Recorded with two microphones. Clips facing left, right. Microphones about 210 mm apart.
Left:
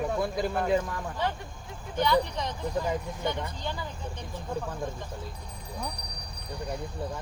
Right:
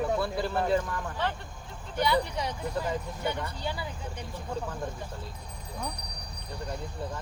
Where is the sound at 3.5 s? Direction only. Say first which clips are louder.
Right 1 dB; 10° right (ahead or behind).